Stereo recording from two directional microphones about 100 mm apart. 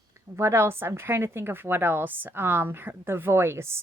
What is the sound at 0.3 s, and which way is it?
A woman's voice, 25° right (ahead or behind).